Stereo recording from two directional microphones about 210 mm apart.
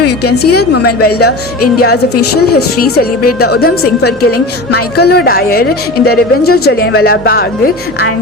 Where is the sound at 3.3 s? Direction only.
50° left (ahead or behind).